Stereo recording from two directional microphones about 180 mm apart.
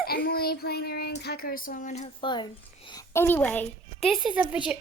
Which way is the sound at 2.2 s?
25° left (ahead or behind).